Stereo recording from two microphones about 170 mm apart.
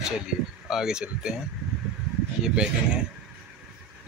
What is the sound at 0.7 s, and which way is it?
Speech, 5° right (ahead or behind).